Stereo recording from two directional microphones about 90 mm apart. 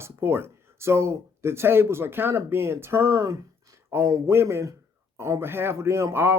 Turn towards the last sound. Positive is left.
turn(degrees=-25)  # may be behind; listen again after turning